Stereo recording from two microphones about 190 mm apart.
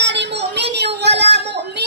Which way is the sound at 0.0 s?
65° right (ahead or behind).